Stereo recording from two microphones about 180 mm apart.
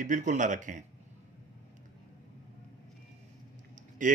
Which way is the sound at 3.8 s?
45° right (ahead or behind).